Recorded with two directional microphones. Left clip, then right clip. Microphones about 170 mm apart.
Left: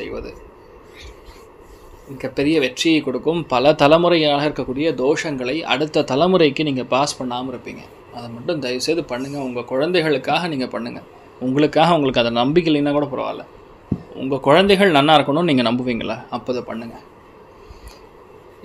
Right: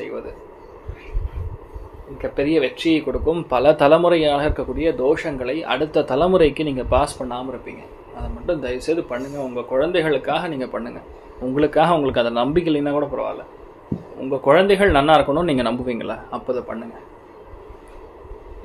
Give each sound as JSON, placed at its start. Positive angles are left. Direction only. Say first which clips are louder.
{"t": 2.1, "sound": "speech", "louder": "left 1 dB", "side_deg": 50}
{"t": 8.5, "sound": "speech", "louder": "left 1 dB", "side_deg": 60}